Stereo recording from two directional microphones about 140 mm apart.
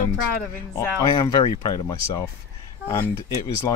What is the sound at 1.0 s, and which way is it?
Speech, 30° left (ahead or behind).